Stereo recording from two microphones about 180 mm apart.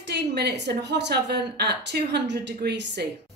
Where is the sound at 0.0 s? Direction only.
65° right (ahead or behind).